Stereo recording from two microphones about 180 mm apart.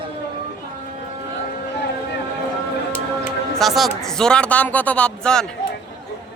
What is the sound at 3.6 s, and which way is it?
Speech, centre (ahead or behind).